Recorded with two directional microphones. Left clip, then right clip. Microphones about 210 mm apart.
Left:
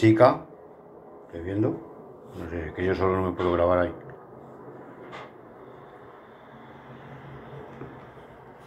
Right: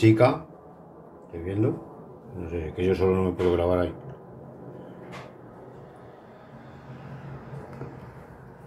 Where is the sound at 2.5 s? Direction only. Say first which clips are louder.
Right 2 dB; 30° left (ahead or behind).